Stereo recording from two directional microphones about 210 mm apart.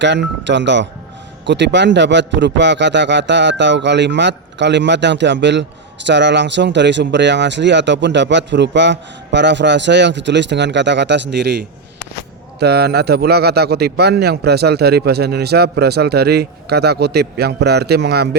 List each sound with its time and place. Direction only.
0.0 s a man's voice: 55° right (ahead or behind)